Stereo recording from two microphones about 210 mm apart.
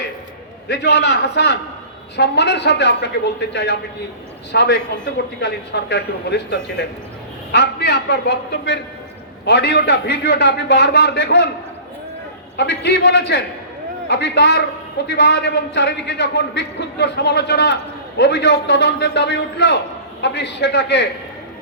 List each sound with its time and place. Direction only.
0.7 s a man's voice: 55° left (ahead or behind)
12.5 s a man's voice: 55° left (ahead or behind)